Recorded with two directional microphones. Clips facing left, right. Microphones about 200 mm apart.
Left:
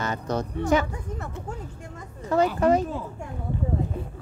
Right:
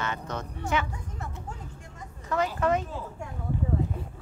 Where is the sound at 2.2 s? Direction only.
30° left (ahead or behind).